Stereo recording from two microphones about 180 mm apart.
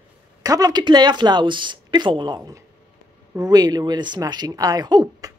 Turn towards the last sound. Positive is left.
turn(degrees=-20)  # may be behind; listen again after turning